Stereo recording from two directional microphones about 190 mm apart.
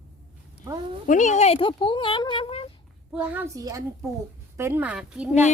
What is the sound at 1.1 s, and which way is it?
Speech, 40° left (ahead or behind).